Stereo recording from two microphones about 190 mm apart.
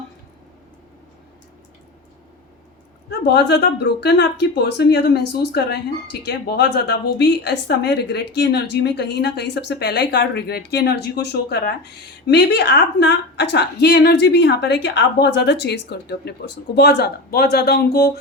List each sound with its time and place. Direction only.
3.1 s a woman's voice: 60° left (ahead or behind)